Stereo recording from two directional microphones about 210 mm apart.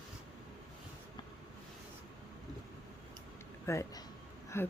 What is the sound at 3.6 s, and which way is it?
Speech, 15° left (ahead or behind).